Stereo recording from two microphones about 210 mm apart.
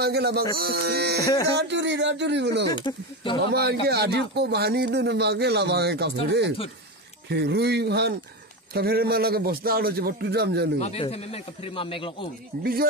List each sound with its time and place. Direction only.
0.0 s speech: 50° right (ahead or behind)
1.2 s speech: 15° left (ahead or behind)
1.6 s speech: 55° right (ahead or behind)
2.7 s speech: 20° left (ahead or behind)
3.4 s speech: 50° right (ahead or behind)
10.8 s speech: 30° left (ahead or behind)